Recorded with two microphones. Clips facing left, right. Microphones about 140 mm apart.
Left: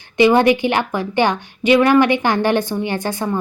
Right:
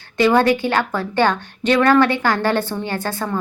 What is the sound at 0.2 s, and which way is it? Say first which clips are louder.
Speech: left 2 dB; 15° left (ahead or behind).